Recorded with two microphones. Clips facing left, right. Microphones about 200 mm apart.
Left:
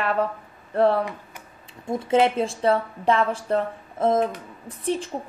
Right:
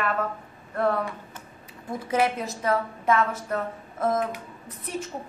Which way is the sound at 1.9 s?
25° left (ahead or behind).